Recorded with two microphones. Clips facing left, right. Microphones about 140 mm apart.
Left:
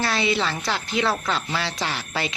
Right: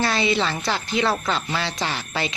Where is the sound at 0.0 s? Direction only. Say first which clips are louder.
Right 2 dB; centre (ahead or behind).